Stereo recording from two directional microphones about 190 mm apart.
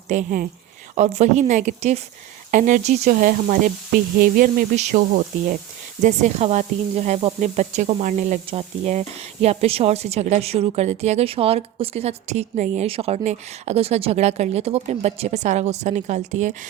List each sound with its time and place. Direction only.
0.1 s speech: 45° right (ahead or behind)